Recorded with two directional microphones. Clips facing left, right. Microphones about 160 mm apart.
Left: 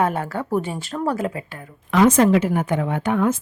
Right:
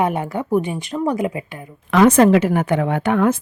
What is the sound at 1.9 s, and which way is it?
A woman's voice, 75° right (ahead or behind).